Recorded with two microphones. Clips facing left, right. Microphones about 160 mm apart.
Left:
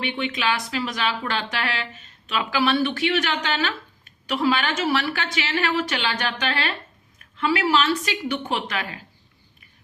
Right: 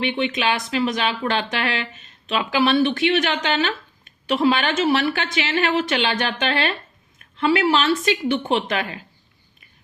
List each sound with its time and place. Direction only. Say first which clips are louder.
0.0 s speech: right 4 dB; 20° right (ahead or behind)